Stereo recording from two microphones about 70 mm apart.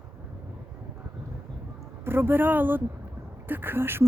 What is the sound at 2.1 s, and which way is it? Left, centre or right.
A woman's voice, right.